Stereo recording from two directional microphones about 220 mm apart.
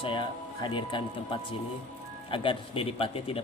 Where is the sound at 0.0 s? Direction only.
20° left (ahead or behind).